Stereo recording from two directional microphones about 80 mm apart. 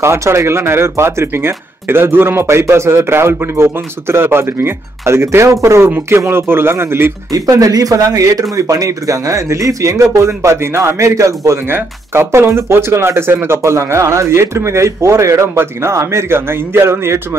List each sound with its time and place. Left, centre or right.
0.0 s speech: right
7.3 s speech: right